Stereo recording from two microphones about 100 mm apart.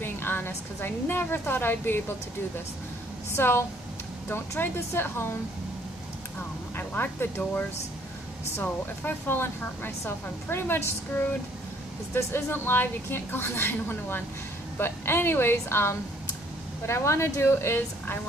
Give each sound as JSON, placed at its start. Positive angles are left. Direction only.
{"t": 0.0, "sound": "speech", "side_deg": 20}
{"t": 3.3, "sound": "speech", "side_deg": 25}
{"t": 6.8, "sound": "speech", "side_deg": 20}